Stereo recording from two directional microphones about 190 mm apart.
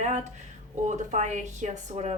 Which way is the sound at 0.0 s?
40° right (ahead or behind).